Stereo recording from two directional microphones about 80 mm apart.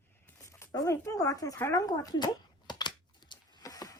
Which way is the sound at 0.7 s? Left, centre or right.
Left.